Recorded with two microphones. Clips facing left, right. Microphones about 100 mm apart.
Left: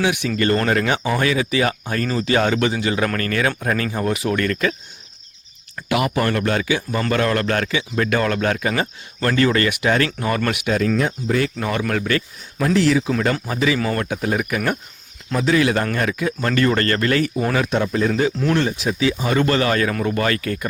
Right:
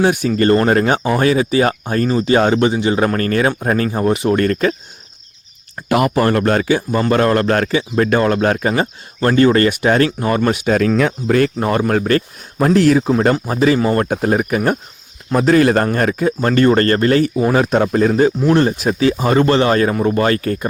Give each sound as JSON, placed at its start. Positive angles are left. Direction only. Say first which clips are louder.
{"t": 0.0, "sound": "speech", "louder": "right 6 dB", "side_deg": -35}
{"t": 5.7, "sound": "speech", "louder": "right 5 dB", "side_deg": -35}
{"t": 10.8, "sound": "speech", "louder": "right 5 dB", "side_deg": -90}
{"t": 11.5, "sound": "speech", "louder": "right 6 dB", "side_deg": -35}
{"t": 15.4, "sound": "speech", "louder": "right 6 dB", "side_deg": -45}